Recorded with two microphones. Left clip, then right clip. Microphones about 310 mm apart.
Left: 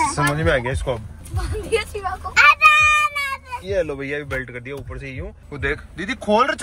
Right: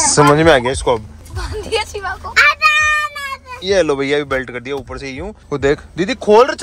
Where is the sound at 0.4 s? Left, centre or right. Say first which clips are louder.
Right 9 dB; centre.